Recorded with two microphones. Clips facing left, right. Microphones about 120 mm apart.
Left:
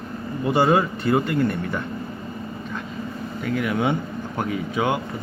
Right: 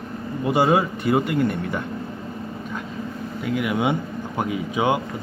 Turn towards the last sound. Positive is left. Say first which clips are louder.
# right 1 dB
turn(degrees=-15)  # may be behind; listen again after turning